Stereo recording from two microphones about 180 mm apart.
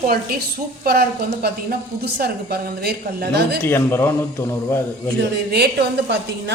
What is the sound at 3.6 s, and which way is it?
Speech, 15° left (ahead or behind).